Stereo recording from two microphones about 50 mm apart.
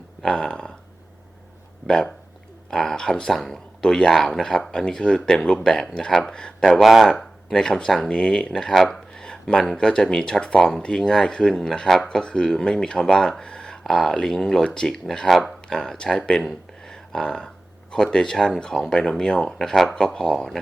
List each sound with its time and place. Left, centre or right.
0.2 s a sound: centre
1.9 s speech: centre
6.8 s speech: centre
7.1 s speech: centre
16.9 s a sound: centre
17.9 s speech: centre